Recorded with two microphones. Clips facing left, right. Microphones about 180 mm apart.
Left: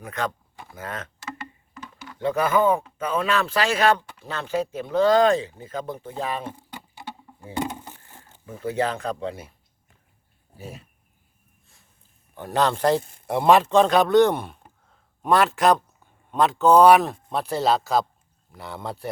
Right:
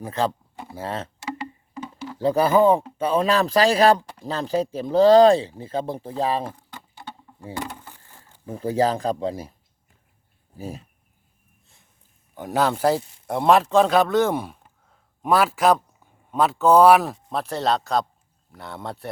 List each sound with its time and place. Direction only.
0.0 s speech: 30° right (ahead or behind)
6.6 s patter: 10° left (ahead or behind)
7.5 s vehicle: 20° left (ahead or behind)
8.4 s speech: 35° right (ahead or behind)
12.3 s speech: 10° right (ahead or behind)
13.0 s speech: 50° left (ahead or behind)
13.2 s a man's voice: centre (ahead or behind)
14.8 s a sound: 5° right (ahead or behind)
16.3 s a man's voice: 5° right (ahead or behind)